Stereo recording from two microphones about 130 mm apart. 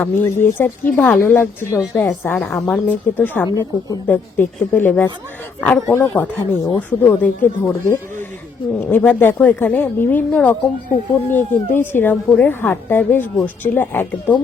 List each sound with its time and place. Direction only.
0.0 s speech: 15° left (ahead or behind)